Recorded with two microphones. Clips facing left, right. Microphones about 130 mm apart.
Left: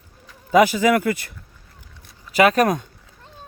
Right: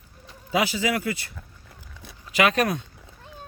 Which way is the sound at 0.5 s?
50° left (ahead or behind).